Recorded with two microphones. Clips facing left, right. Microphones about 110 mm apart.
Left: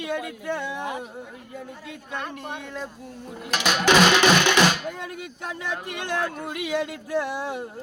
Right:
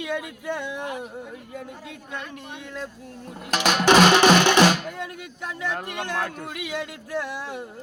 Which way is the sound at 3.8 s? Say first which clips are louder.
Right 2 dB; 35° right (ahead or behind).